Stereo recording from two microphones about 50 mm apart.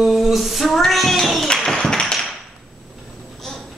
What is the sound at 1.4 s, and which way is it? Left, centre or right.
Tap, centre.